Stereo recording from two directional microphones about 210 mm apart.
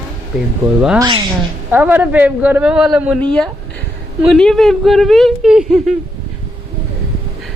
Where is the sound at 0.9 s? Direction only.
20° right (ahead or behind).